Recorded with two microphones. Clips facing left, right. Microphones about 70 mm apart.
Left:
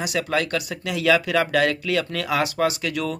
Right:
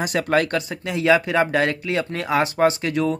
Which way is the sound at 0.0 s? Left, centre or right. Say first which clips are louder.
Right 4 dB; right.